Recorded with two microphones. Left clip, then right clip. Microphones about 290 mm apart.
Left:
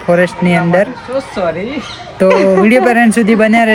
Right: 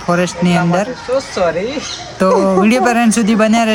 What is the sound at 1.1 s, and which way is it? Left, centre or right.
Speech, right.